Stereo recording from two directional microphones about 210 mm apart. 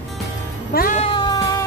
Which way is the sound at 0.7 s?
45° left (ahead or behind).